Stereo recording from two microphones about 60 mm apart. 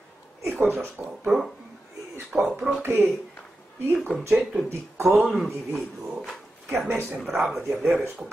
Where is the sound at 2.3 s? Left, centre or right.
Centre.